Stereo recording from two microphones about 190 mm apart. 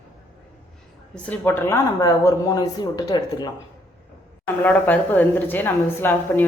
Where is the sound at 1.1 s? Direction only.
5° left (ahead or behind).